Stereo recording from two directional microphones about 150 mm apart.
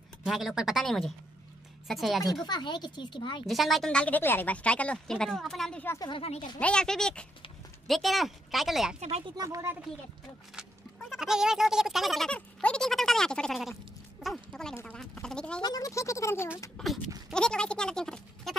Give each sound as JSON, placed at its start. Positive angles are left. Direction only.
{"t": 0.2, "sound": "speech", "side_deg": 0}
{"t": 2.4, "sound": "speech", "side_deg": 30}
{"t": 3.4, "sound": "speech", "side_deg": 0}
{"t": 5.9, "sound": "speech", "side_deg": 35}
{"t": 6.6, "sound": "speech", "side_deg": 5}
{"t": 9.4, "sound": "speech", "side_deg": -20}
{"t": 10.5, "sound": "speech", "side_deg": 0}
{"t": 14.2, "sound": "a sound", "side_deg": 5}
{"t": 14.8, "sound": "speech", "side_deg": 10}
{"t": 15.6, "sound": "speech", "side_deg": 25}
{"t": 16.7, "sound": "speech", "side_deg": 0}